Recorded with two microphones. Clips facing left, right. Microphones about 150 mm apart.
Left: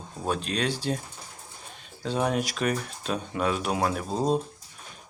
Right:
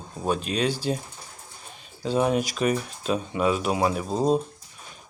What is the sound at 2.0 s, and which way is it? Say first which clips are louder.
Speech: right 4 dB; centre (ahead or behind).